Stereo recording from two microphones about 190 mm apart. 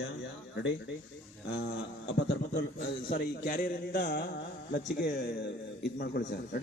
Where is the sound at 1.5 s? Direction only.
70° left (ahead or behind).